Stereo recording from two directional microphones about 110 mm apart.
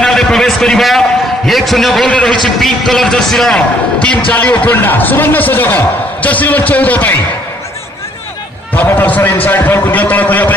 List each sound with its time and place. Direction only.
0.0 s a man's voice: 5° left (ahead or behind)
8.7 s a man's voice: 15° left (ahead or behind)